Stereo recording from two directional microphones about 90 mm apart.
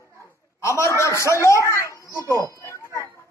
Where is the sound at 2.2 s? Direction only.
35° right (ahead or behind).